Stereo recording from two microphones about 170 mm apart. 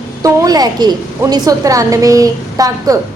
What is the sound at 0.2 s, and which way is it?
A woman's voice, 20° right (ahead or behind).